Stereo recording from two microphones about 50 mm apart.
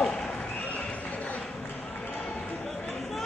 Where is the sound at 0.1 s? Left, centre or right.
Centre.